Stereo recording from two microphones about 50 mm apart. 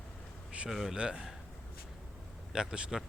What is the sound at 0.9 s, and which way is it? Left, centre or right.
Speech, right.